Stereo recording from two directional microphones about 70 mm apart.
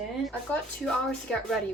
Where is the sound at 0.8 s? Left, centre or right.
Centre.